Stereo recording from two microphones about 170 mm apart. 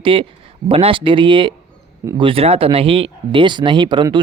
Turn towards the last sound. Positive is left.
turn(degrees=-25)  # may be behind; listen again after turning